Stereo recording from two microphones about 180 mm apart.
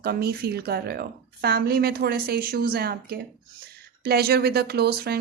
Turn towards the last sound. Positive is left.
turn(degrees=-60)  # may be behind; listen again after turning